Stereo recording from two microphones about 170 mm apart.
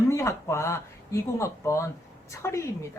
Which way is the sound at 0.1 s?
15° left (ahead or behind).